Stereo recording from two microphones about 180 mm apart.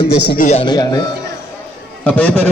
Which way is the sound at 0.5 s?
25° left (ahead or behind).